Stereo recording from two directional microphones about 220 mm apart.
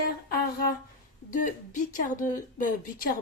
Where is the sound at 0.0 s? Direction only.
45° left (ahead or behind).